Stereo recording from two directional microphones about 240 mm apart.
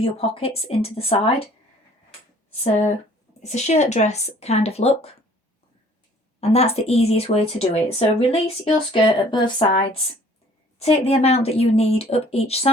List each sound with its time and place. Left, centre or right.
0.0 s speech: left
3.4 s speech: left
6.4 s speech: left